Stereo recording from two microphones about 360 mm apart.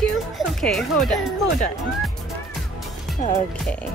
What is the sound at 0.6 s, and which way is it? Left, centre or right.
Speech, centre.